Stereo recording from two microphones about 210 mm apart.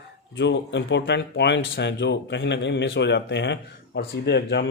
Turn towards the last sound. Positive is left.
turn(degrees=55)  # may be behind; listen again after turning